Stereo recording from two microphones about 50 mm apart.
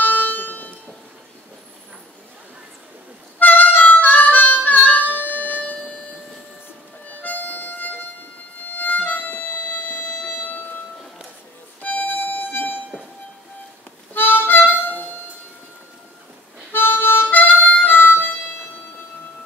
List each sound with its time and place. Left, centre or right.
0.0 s music: left
3.3 s harmonica: left
5.1 s music: left
7.1 s music: left
11.8 s music: left
12.2 s air horn: left
14.1 s music: left
16.7 s harmonica: left